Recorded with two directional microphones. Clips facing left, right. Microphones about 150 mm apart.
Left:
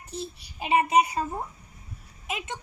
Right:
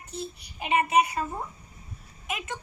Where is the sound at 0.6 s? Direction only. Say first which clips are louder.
Left 1 dB; 30° left (ahead or behind).